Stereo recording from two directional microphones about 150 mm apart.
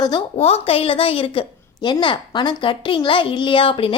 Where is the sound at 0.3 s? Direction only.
40° left (ahead or behind).